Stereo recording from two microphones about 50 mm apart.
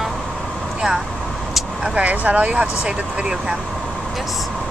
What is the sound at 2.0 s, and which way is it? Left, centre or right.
Speech, right.